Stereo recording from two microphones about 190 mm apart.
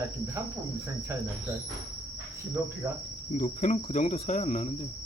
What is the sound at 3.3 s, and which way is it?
Cricket, 40° left (ahead or behind).